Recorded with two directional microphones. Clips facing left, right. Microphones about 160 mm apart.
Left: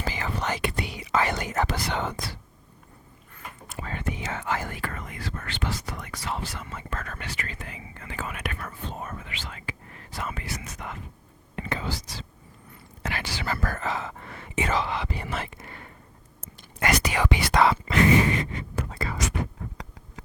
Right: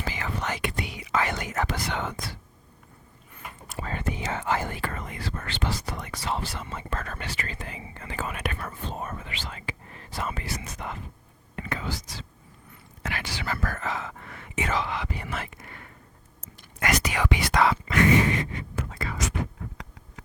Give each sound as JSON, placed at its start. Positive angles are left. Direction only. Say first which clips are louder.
{"t": 0.0, "sound": "whispering", "louder": "left 2 dB", "side_deg": 35}
{"t": 3.8, "sound": "speech", "louder": "right 1 dB", "side_deg": -35}
{"t": 11.5, "sound": "speech", "louder": "left 1 dB", "side_deg": 30}
{"t": 18.8, "sound": "a sound", "louder": "left 2 dB", "side_deg": 35}